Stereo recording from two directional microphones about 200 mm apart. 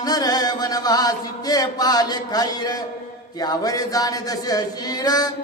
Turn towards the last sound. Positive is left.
turn(degrees=20)  # may be behind; listen again after turning